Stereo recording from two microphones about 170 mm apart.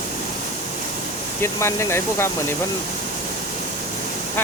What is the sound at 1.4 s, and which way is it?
Speech, 15° left (ahead or behind).